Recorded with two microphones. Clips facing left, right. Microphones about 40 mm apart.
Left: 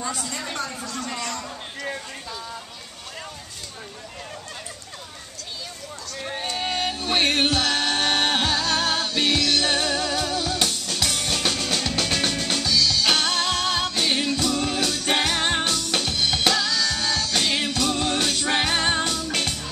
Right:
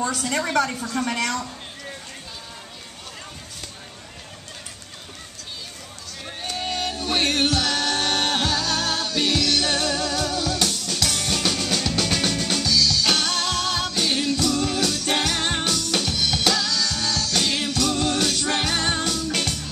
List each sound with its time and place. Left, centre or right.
0.0 s a woman's voice: right
6.5 s music: centre